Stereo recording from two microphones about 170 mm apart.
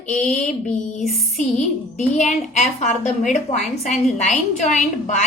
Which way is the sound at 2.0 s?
45° left (ahead or behind).